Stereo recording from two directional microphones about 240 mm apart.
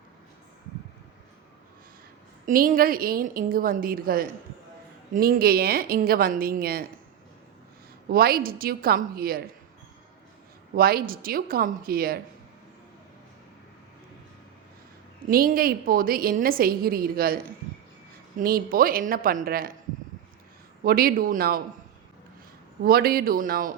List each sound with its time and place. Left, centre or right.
2.5 s a woman's voice: right
8.1 s a woman's voice: right
10.8 s a woman's voice: right
15.3 s a woman's voice: right
20.8 s a woman's voice: right
22.8 s a woman's voice: right